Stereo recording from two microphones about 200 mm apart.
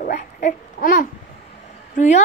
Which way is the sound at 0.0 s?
40° left (ahead or behind).